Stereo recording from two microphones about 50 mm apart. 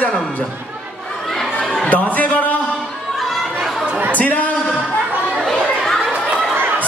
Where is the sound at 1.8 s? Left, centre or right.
Left.